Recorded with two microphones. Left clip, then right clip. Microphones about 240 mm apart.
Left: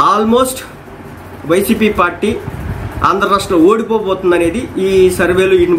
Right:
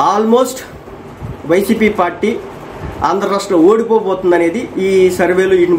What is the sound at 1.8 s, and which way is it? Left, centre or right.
Speech, centre.